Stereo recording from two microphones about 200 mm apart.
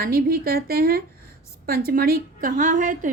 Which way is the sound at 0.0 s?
50° right (ahead or behind).